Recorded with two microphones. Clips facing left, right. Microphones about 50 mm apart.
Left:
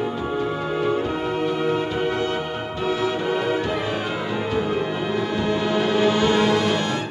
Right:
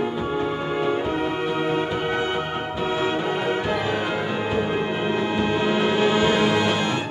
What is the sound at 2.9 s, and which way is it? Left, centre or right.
Music, right.